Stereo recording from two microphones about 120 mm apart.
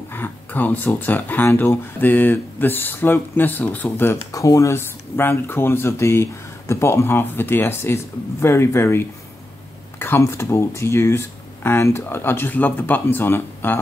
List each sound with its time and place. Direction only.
0.1 s speech: 15° left (ahead or behind)
4.3 s speech: 25° left (ahead or behind)